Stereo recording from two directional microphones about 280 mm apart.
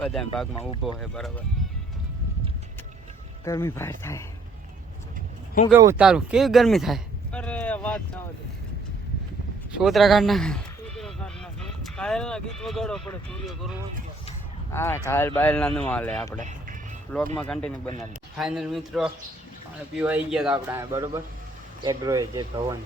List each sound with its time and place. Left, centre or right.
0.0 s speech: centre
3.4 s speech: centre
5.7 s speech: centre
9.7 s speech: centre
14.7 s speech: centre
16.4 s speech: right
17.3 s speech: centre